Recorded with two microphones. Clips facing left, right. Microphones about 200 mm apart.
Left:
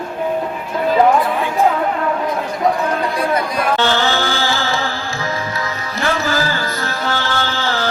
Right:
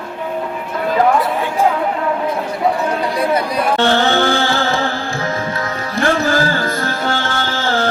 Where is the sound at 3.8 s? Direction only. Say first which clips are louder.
Right 6 dB; 50° right (ahead or behind).